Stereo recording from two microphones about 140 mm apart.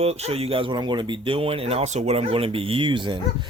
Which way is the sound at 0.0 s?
45° right (ahead or behind).